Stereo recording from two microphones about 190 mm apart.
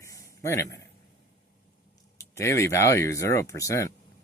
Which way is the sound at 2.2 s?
15° left (ahead or behind).